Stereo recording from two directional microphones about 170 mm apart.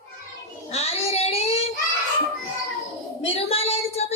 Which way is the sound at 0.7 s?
35° left (ahead or behind).